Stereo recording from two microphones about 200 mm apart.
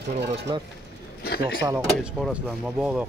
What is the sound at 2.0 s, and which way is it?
Speech, 5° right (ahead or behind).